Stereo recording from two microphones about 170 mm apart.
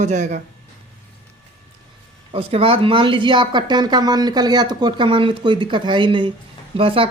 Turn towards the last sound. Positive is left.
turn(degrees=-35)  # may be behind; listen again after turning